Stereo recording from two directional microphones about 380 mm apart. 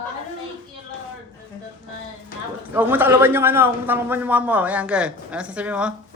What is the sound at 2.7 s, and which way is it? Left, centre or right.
Speech, centre.